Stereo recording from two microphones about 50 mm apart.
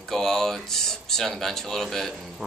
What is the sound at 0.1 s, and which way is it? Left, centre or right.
Speech, centre.